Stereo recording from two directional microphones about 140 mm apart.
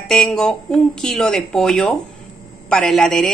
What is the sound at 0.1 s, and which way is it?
A woman's voice, centre (ahead or behind).